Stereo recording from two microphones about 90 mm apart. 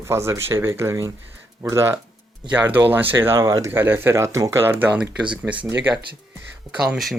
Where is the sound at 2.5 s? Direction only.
20° right (ahead or behind).